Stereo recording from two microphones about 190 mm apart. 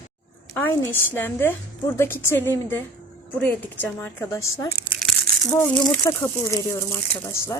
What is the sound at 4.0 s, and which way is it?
Speech, 15° left (ahead or behind).